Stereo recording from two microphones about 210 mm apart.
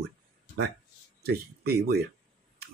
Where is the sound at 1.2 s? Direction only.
50° right (ahead or behind).